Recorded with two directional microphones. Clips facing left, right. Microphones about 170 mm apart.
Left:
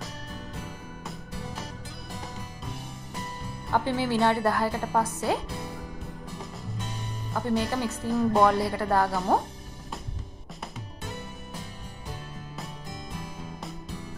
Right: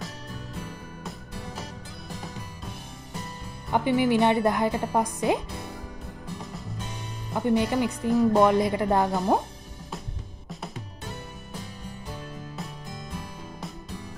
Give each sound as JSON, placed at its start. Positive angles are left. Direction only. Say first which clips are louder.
{"t": 3.7, "sound": "speech", "louder": "right 4 dB", "side_deg": -15}
{"t": 7.3, "sound": "speech", "louder": "right 4 dB", "side_deg": -15}
{"t": 8.1, "sound": "speech", "louder": "right 4 dB", "side_deg": 0}
{"t": 8.4, "sound": "speech", "louder": "right 2 dB", "side_deg": -20}